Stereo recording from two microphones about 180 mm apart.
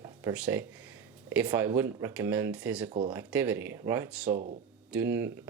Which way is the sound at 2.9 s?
30° right (ahead or behind).